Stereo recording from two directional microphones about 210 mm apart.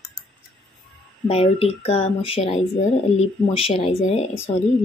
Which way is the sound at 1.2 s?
25° left (ahead or behind).